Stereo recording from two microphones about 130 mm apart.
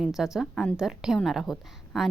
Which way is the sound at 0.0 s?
5° right (ahead or behind).